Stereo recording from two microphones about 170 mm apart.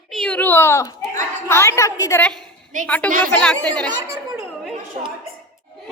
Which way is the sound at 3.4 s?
5° left (ahead or behind).